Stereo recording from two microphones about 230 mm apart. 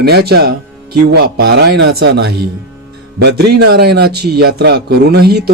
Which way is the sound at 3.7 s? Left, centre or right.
Right.